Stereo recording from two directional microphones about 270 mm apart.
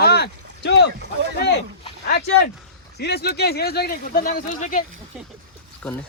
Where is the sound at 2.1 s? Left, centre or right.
Left.